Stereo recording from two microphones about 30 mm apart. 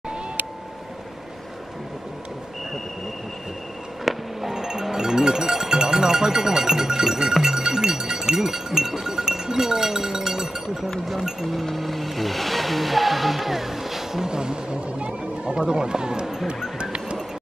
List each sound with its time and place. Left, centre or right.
4.0 s a sound: centre
4.6 s speech: centre
11.6 s music: centre
14.2 s speech: right